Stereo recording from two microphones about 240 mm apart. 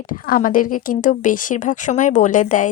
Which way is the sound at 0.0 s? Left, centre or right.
Left.